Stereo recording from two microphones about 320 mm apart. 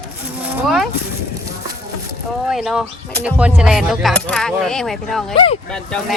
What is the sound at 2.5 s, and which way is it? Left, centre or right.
Speech, centre.